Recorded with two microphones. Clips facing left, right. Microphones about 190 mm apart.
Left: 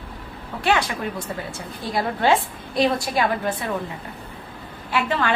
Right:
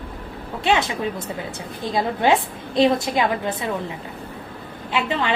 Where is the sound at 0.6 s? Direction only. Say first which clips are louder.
Right 1 dB; 20° right (ahead or behind).